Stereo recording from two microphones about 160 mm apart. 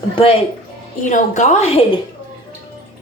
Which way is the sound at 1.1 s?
50° left (ahead or behind).